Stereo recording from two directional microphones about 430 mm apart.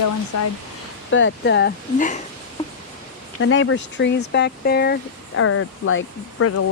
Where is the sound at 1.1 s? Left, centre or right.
Left.